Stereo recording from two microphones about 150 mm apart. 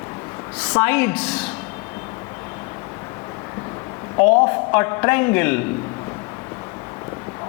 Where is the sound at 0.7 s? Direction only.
10° left (ahead or behind).